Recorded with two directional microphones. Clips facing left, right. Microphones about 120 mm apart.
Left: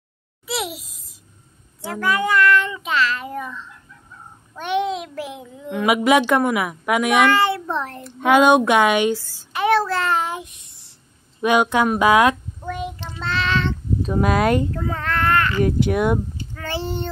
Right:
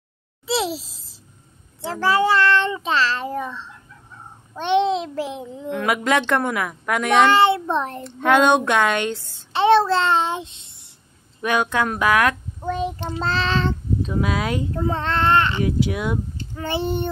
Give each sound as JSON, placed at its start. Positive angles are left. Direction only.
{"t": 0.5, "sound": "babbling", "side_deg": -30}
{"t": 1.8, "sound": "child singing", "side_deg": -30}
{"t": 5.7, "sound": "a woman's voice", "side_deg": 10}
{"t": 7.2, "sound": "a child's voice", "side_deg": -25}
{"t": 8.2, "sound": "a woman's voice", "side_deg": 5}
{"t": 9.2, "sound": "child singing", "side_deg": -25}
{"t": 11.4, "sound": "a woman's voice", "side_deg": 15}
{"t": 12.6, "sound": "child singing", "side_deg": -25}
{"t": 14.0, "sound": "speech", "side_deg": 45}
{"t": 14.7, "sound": "child singing", "side_deg": -25}
{"t": 15.6, "sound": "speech", "side_deg": 55}
{"t": 16.5, "sound": "child singing", "side_deg": -20}